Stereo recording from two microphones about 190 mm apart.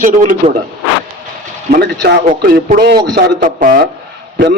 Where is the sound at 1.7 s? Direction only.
55° right (ahead or behind).